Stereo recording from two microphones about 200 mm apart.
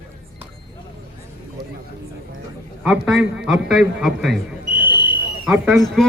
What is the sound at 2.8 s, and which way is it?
A man's voice, centre (ahead or behind).